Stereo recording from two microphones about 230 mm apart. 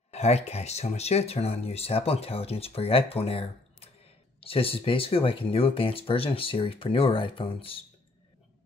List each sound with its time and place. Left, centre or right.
0.1 s speech: left